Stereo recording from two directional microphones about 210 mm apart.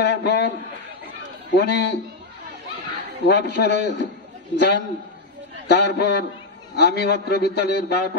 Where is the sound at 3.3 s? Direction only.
50° left (ahead or behind).